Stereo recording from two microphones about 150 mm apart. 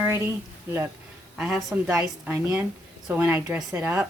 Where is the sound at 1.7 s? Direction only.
10° right (ahead or behind).